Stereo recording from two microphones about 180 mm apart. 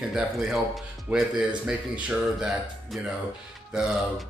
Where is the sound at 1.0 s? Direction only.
5° right (ahead or behind).